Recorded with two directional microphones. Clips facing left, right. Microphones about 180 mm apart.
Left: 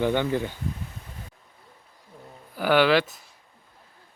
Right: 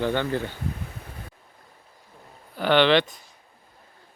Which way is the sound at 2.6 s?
10° left (ahead or behind).